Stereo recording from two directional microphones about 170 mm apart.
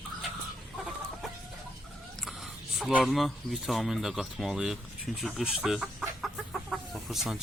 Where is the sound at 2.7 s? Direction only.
Centre (ahead or behind).